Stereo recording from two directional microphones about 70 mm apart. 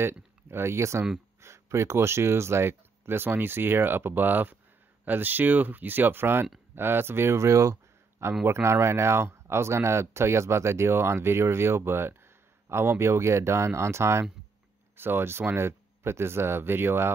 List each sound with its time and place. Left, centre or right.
0.0 s speech: right